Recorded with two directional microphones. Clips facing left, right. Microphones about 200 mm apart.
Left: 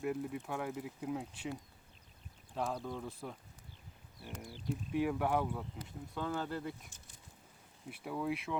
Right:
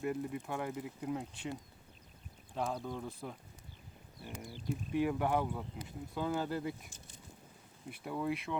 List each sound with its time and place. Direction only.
0.0 s speech: centre (ahead or behind)
2.6 s speech: centre (ahead or behind)
7.9 s speech: centre (ahead or behind)